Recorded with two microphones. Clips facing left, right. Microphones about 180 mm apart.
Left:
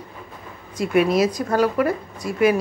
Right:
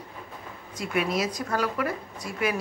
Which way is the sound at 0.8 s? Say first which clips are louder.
Left 9 dB; 75° left (ahead or behind).